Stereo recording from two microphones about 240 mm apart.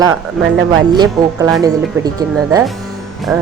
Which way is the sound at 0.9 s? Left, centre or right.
Centre.